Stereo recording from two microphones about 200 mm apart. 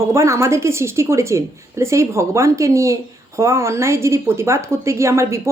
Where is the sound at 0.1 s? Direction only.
15° right (ahead or behind).